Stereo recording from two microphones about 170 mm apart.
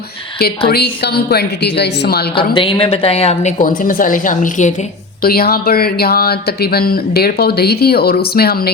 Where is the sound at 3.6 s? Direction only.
55° left (ahead or behind).